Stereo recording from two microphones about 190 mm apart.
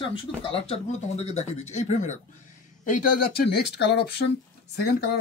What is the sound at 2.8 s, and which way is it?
Speech, 55° left (ahead or behind).